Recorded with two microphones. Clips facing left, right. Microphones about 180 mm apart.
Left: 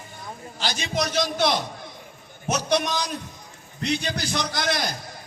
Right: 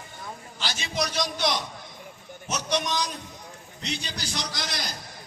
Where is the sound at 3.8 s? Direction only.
60° left (ahead or behind).